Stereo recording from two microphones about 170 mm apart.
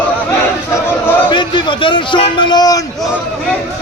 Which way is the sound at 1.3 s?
30° left (ahead or behind).